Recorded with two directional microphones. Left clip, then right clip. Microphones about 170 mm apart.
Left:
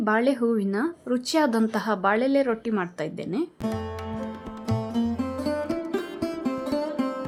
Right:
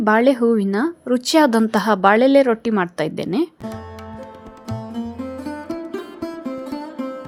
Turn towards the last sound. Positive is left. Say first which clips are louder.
# left 2 dB
turn(degrees=0)  # may be behind; listen again after turning